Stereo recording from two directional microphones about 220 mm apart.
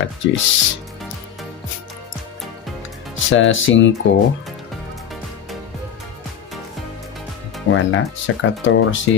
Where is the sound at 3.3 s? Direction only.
60° left (ahead or behind).